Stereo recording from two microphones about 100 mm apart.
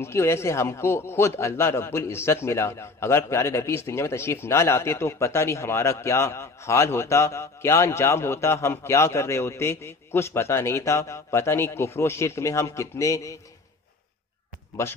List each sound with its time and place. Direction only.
0.0 s a man's voice: 25° left (ahead or behind)